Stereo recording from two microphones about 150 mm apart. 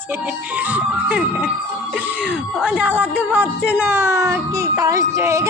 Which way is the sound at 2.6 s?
10° right (ahead or behind).